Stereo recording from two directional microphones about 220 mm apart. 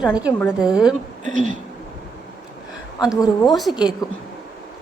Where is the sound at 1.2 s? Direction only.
35° right (ahead or behind).